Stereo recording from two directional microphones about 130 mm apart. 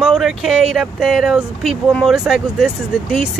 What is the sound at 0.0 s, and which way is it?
Speech, centre (ahead or behind).